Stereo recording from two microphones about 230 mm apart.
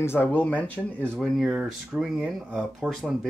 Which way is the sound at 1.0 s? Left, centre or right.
Centre.